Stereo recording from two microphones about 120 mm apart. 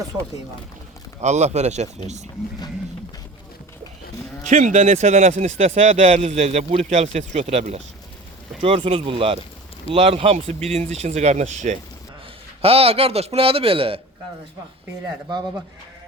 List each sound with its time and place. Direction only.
1.2 s speech: 70° right (ahead or behind)
4.4 s a man's voice: 85° right; by 10.3 s 50° right (ahead or behind)
10.8 s speech: 60° right (ahead or behind); by 11.8 s 80° right
12.6 s a man's voice: 55° right (ahead or behind)